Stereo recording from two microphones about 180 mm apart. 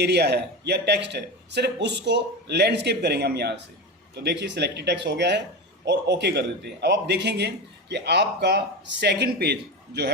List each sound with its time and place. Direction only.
0.0 s a man's voice: 65° right (ahead or behind)